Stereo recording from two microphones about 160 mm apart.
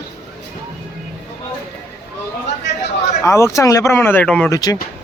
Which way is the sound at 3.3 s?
15° left (ahead or behind).